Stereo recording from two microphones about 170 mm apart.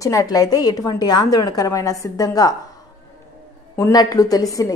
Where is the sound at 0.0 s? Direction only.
20° left (ahead or behind).